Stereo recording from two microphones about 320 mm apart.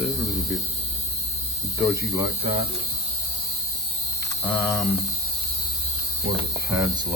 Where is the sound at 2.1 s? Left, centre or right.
Centre.